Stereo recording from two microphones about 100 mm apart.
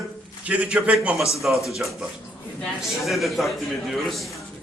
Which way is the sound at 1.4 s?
Centre (ahead or behind).